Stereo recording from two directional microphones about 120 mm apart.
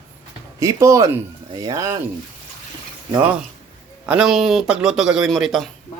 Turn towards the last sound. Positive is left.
turn(degrees=0)  # may be behind; listen again after turning